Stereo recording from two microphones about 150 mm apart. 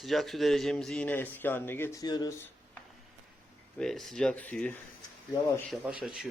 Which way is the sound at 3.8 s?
Centre (ahead or behind).